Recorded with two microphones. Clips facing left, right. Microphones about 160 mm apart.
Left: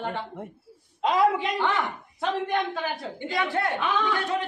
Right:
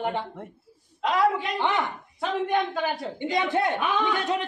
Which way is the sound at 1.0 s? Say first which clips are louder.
Left 1 dB; 20° left (ahead or behind).